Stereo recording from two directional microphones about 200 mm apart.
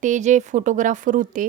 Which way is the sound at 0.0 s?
35° right (ahead or behind).